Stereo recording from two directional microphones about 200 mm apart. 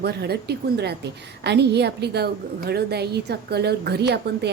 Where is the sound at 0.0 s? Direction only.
55° right (ahead or behind).